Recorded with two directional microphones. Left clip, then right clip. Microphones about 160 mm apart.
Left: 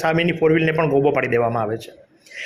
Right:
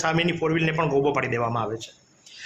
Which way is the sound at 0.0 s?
10° left (ahead or behind).